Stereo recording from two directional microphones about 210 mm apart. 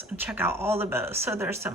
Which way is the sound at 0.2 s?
10° right (ahead or behind).